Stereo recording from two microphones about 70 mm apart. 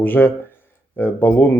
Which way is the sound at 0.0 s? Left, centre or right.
Left.